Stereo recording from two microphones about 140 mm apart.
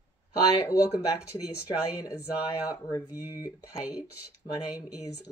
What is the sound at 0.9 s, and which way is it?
Speech, 20° left (ahead or behind).